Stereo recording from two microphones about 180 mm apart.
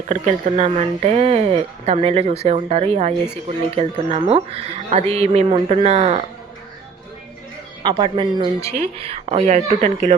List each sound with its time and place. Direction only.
0.1 s speech: 40° right (ahead or behind)
7.9 s a woman's voice: 25° right (ahead or behind)